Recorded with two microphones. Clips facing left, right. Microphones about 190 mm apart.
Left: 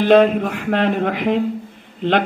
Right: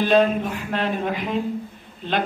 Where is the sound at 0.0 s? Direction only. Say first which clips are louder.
Left 5 dB; 65° left (ahead or behind).